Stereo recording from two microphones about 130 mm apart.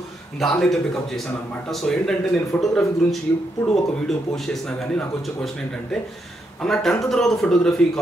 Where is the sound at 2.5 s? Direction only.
10° left (ahead or behind).